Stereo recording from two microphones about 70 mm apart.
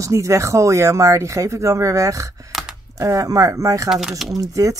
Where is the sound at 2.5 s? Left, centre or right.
Centre.